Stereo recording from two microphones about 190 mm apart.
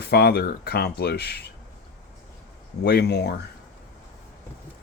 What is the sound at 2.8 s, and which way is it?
Speech, 55° left (ahead or behind).